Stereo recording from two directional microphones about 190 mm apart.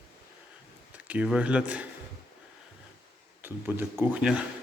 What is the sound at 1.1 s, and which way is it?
Speech, 5° right (ahead or behind).